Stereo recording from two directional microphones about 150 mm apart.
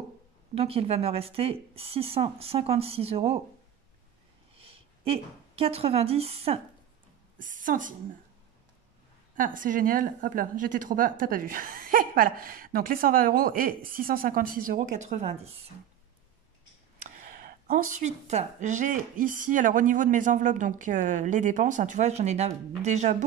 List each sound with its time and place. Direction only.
0.6 s speech: 40° right (ahead or behind)
4.6 s a woman's voice: 40° right (ahead or behind)
7.3 s a woman's voice: 60° right (ahead or behind)
9.3 s a woman's voice: 65° right (ahead or behind); by 15.6 s 45° right (ahead or behind)
17.1 s a sound: 60° right (ahead or behind)
18.0 s speech: 50° right (ahead or behind)